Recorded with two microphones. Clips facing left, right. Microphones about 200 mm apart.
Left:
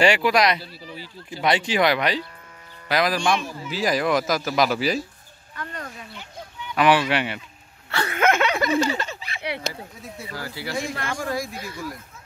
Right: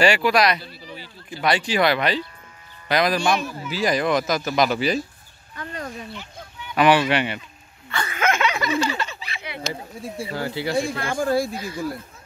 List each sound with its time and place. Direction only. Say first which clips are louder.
0.0 s speech: even; 20° left (ahead or behind); by 5.0 s 5° left (ahead or behind)
6.7 s speech: right 2 dB; centre (ahead or behind)
7.9 s a sound: left 2 dB; 65° left (ahead or behind); by 9.4 s 45° left (ahead or behind)
10.0 s speech: right 8 dB; 30° right (ahead or behind)